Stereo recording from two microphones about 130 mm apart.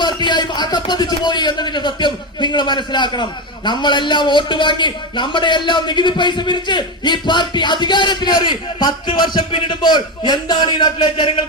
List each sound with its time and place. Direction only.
0.0 s a man's voice: 35° left (ahead or behind)